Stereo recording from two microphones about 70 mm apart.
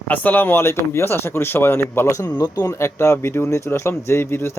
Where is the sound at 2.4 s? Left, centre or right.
Left.